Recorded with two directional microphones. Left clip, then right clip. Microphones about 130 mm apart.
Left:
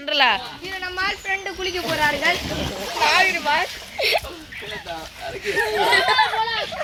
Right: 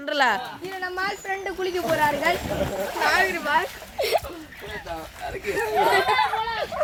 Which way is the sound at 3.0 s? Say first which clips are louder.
Left 4 dB; 90° right.